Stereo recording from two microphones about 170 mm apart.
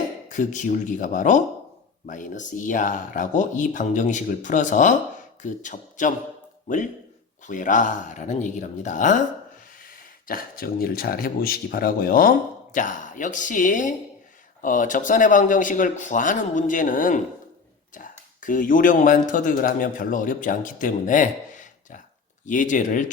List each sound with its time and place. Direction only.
0.3 s speech: 50° left (ahead or behind)
7.4 s speech: 50° left (ahead or behind)
10.2 s speech: 60° left (ahead or behind)